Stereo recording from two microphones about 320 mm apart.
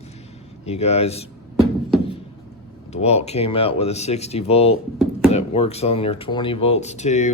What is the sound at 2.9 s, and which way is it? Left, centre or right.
Speech, centre.